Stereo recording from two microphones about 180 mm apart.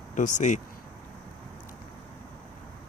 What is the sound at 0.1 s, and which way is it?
Speech, 45° left (ahead or behind).